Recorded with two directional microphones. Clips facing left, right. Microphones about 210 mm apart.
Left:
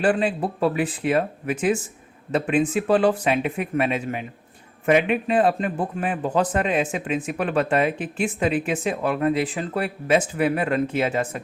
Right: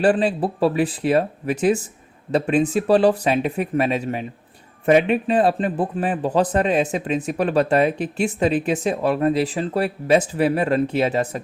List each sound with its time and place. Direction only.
0.0 s speech: 35° right (ahead or behind)